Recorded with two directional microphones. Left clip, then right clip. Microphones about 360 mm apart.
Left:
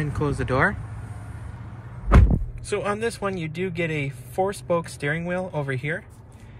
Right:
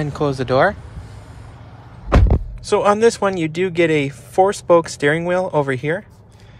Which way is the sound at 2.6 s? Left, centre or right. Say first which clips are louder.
Right 12 dB; centre.